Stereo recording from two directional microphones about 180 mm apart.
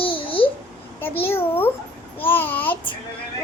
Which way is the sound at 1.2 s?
10° left (ahead or behind).